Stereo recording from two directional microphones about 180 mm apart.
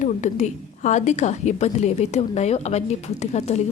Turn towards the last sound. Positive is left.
turn(degrees=40)  # may be behind; listen again after turning